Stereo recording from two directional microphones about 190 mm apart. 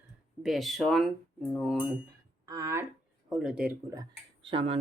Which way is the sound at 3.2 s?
Centre (ahead or behind).